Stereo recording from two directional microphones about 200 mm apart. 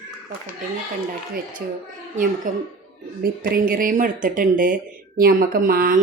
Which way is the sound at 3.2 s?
45° right (ahead or behind).